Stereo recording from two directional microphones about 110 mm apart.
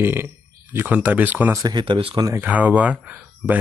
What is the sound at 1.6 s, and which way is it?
Speech, 45° right (ahead or behind).